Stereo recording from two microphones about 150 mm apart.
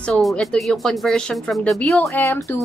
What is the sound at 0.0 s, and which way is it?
Speech, centre (ahead or behind).